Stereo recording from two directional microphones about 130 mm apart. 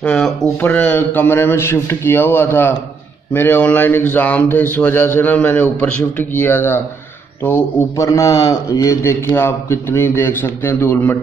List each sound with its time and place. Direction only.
0.0 s a man's voice: 5° left (ahead or behind)